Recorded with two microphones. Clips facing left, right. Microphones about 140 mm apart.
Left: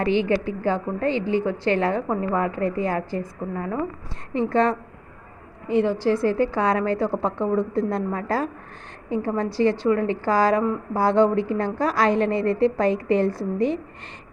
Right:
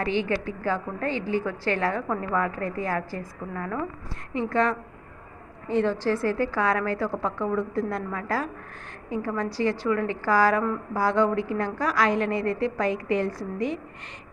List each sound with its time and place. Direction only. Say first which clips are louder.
0.3 s a woman's voice: left 5 dB; 25° left (ahead or behind)
5.6 s a woman's voice: left 3 dB; 15° left (ahead or behind)